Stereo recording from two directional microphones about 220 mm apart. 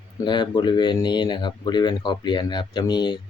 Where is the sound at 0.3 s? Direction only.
20° left (ahead or behind).